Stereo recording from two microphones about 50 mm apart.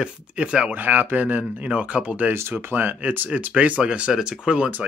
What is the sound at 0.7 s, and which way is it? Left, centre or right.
Speech, right.